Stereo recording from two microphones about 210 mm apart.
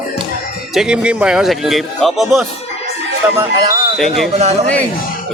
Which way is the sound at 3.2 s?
15° right (ahead or behind).